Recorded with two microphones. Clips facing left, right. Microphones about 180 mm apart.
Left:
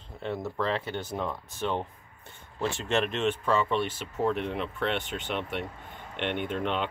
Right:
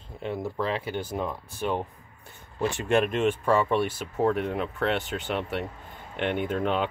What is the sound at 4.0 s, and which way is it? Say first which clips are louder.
Speech: right 3 dB; 45° right (ahead or behind).